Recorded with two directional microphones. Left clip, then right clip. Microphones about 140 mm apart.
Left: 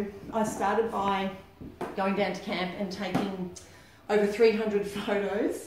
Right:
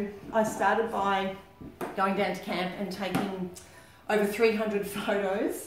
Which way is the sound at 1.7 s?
20° right (ahead or behind).